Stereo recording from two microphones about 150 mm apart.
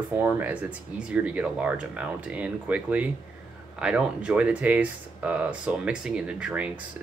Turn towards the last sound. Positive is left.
turn(degrees=-10)  # may be behind; listen again after turning